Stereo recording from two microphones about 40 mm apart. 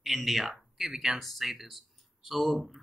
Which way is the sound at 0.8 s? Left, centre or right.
Centre.